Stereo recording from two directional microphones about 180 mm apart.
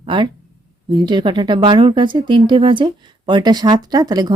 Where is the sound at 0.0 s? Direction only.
25° right (ahead or behind).